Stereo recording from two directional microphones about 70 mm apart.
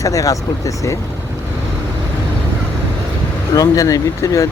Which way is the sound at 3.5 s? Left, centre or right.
Left.